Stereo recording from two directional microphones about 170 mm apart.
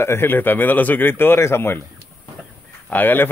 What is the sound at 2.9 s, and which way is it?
Speech, 10° left (ahead or behind).